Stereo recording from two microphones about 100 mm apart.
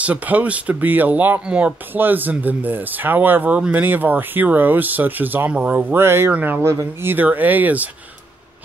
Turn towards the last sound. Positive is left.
turn(degrees=-15)  # may be behind; listen again after turning